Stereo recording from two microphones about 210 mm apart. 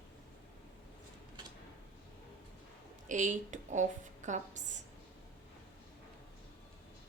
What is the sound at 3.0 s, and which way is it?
A woman's voice, 35° right (ahead or behind).